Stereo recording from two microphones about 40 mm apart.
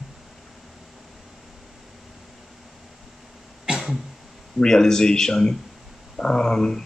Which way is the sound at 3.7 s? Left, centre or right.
Centre.